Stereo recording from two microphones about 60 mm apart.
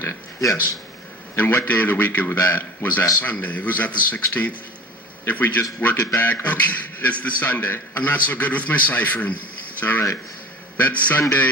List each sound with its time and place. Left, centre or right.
0.3 s speech: left
1.4 s a man's voice: left
9.8 s a man's voice: left
10.8 s a man's voice: left